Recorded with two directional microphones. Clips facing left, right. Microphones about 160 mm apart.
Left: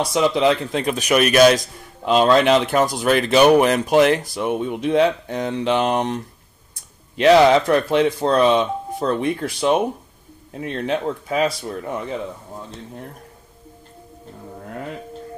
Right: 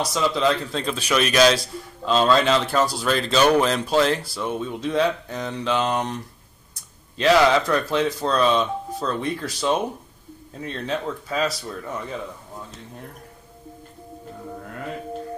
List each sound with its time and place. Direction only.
0.0 s speech: 20° left (ahead or behind)
1.1 s a man's voice: 55° left (ahead or behind)
1.6 s a man's voice: 15° left (ahead or behind)
7.2 s speech: 20° left (ahead or behind)